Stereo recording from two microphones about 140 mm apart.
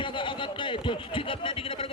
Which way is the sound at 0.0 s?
35° left (ahead or behind).